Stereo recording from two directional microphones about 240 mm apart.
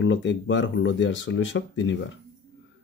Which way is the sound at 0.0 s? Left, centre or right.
Left.